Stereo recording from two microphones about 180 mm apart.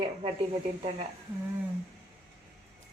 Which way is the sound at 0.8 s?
30° right (ahead or behind).